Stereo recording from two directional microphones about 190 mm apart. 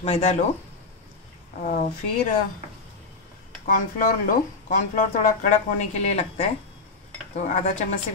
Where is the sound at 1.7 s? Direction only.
45° left (ahead or behind).